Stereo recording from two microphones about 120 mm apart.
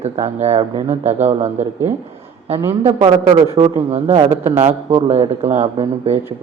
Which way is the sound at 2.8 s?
45° right (ahead or behind).